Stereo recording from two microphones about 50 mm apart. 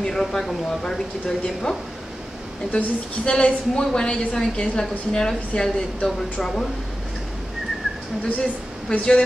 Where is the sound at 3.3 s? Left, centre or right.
Centre.